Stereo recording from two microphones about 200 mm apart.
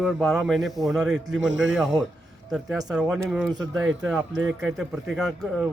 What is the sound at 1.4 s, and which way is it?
Speech, 70° right (ahead or behind).